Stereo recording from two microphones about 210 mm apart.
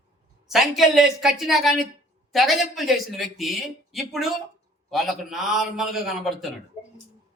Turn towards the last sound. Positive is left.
turn(degrees=0)  # may be behind; listen again after turning